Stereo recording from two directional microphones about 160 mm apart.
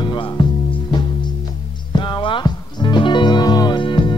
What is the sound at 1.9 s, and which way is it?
Music, 30° left (ahead or behind).